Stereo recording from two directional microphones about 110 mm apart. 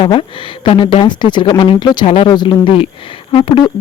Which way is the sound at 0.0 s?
50° left (ahead or behind).